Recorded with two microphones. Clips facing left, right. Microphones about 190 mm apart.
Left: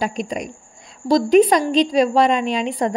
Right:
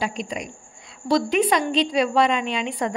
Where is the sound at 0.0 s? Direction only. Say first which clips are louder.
Left 4 dB; 45° left (ahead or behind).